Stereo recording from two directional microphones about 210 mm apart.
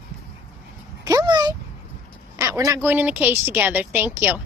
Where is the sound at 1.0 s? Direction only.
20° right (ahead or behind).